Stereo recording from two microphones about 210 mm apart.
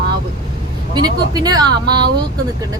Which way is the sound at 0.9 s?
20° right (ahead or behind).